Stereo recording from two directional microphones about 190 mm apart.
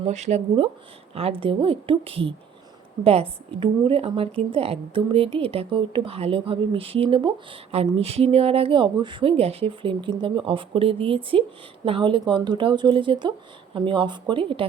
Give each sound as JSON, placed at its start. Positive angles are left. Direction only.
{"t": 0.0, "sound": "a woman's voice", "side_deg": -35}